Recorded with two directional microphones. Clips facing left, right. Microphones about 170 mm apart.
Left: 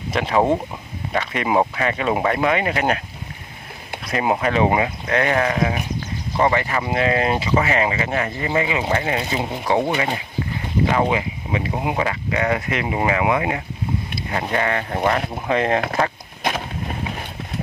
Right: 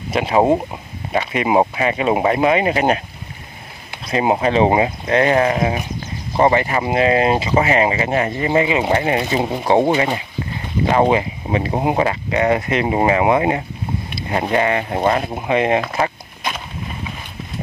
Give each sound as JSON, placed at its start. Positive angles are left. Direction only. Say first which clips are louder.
{"t": 0.1, "sound": "speech", "louder": "right 3 dB", "side_deg": -10}
{"t": 4.1, "sound": "speech", "louder": "right 4 dB", "side_deg": -25}